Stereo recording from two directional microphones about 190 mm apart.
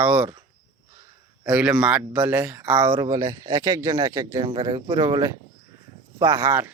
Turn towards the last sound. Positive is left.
turn(degrees=-10)  # may be behind; listen again after turning